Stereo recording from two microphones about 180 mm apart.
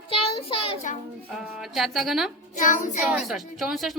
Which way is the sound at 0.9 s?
45° left (ahead or behind).